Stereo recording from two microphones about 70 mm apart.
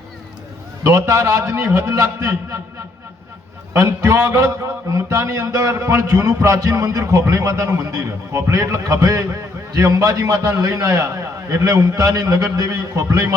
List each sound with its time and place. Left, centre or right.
0.9 s a man's voice: right
3.7 s a man's voice: right